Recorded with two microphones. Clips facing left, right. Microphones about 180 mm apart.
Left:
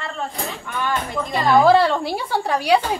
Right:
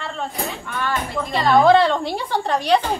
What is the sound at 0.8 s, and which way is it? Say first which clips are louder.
A woman's voice: left 1 dB; 15° left (ahead or behind).